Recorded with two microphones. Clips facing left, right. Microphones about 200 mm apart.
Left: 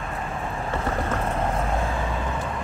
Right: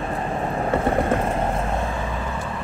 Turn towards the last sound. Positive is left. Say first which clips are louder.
# right 6 dB
turn(degrees=-30)  # may be behind; listen again after turning